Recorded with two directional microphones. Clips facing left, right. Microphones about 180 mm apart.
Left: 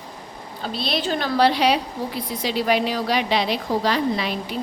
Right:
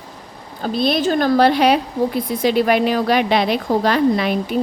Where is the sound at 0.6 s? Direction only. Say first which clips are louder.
Right 8 dB; 50° right (ahead or behind).